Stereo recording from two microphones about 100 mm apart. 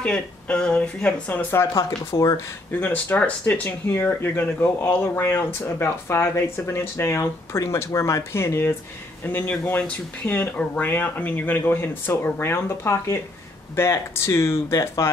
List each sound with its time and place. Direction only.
0.0 s speech: 10° left (ahead or behind); by 15.0 s 30° left (ahead or behind)